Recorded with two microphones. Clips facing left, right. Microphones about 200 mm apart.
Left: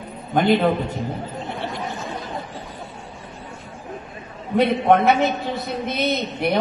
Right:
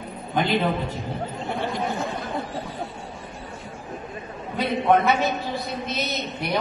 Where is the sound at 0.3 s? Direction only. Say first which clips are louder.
Left 5 dB; 50° left (ahead or behind).